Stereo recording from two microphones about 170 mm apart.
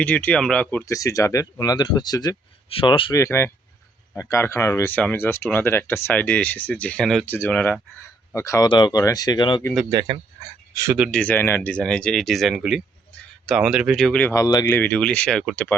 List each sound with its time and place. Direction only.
0.0 s speech: 10° left (ahead or behind)
0.9 s speech: 20° left (ahead or behind)
3.2 s speech: 15° left (ahead or behind)
7.3 s speech: 15° left (ahead or behind)
10.7 s speech: 20° right (ahead or behind)
11.1 s speech: 10° left (ahead or behind)
14.3 s speech: 20° left (ahead or behind)
14.8 s speech: 5° left (ahead or behind)